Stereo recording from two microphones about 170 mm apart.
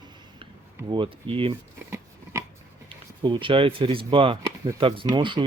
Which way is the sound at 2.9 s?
30° right (ahead or behind).